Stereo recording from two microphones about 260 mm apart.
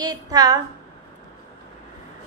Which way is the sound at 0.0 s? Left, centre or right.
Centre.